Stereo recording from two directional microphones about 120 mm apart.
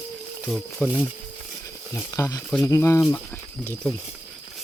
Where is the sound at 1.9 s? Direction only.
20° left (ahead or behind).